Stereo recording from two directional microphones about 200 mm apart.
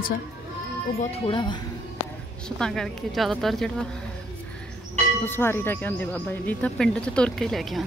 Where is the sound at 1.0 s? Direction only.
30° left (ahead or behind).